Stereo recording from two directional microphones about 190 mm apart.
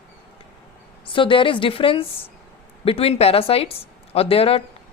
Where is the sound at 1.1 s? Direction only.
25° left (ahead or behind).